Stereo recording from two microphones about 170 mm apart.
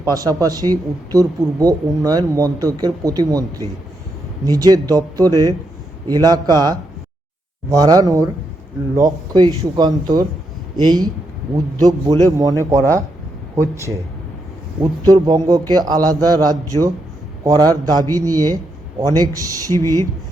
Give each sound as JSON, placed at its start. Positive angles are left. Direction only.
{"t": 0.0, "sound": "speech", "side_deg": -20}
{"t": 4.4, "sound": "a man's voice", "side_deg": -20}